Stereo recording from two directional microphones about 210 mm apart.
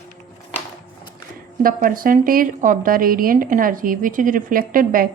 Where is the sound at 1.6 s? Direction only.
40° right (ahead or behind).